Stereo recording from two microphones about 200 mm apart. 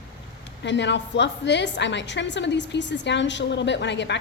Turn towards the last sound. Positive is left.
turn(degrees=60)  # may be behind; listen again after turning